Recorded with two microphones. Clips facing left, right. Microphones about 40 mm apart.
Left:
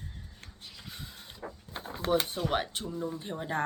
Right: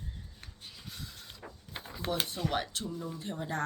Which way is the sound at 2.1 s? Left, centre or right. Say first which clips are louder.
Left 4 dB; left.